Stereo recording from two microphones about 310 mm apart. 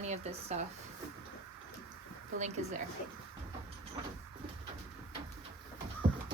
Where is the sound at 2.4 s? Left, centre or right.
Right.